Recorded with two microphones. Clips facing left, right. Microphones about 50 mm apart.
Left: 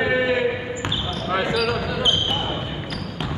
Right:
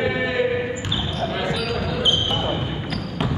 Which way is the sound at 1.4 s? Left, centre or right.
Left.